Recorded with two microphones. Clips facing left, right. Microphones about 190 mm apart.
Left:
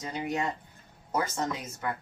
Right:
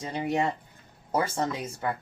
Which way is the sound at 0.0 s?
30° right (ahead or behind).